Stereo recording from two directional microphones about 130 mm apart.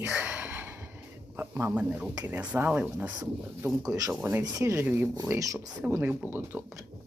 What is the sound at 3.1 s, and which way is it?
Speech, 20° right (ahead or behind).